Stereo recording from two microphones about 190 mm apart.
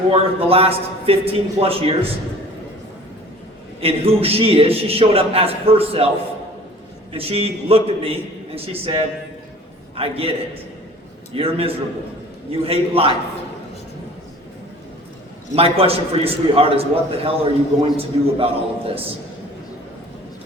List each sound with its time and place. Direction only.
0.1 s a man's voice: 30° right (ahead or behind)
3.8 s a man's voice: 30° right (ahead or behind)
7.1 s a man's voice: 30° right (ahead or behind)
15.5 s a man's voice: 30° right (ahead or behind)